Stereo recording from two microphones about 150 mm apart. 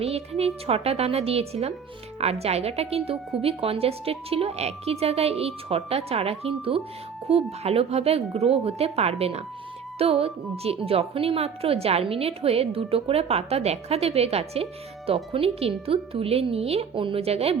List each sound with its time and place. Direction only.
0.0 s a woman's voice: 45° right (ahead or behind)